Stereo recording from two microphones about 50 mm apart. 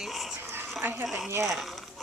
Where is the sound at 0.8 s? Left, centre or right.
Right.